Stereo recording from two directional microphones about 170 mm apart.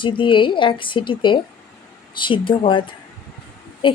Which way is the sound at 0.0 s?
30° left (ahead or behind).